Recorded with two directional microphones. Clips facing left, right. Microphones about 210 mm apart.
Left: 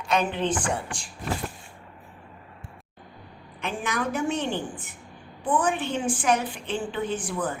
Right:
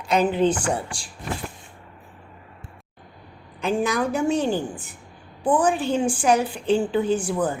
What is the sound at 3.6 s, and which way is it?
A woman's voice, 35° right (ahead or behind).